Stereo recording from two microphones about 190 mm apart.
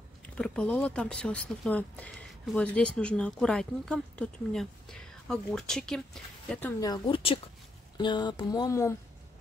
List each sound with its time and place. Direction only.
0.4 s speech: 5° left (ahead or behind)
6.8 s speech: 25° left (ahead or behind)